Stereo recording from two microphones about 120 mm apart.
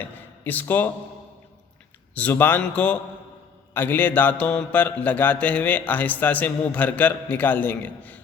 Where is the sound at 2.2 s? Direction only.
15° left (ahead or behind).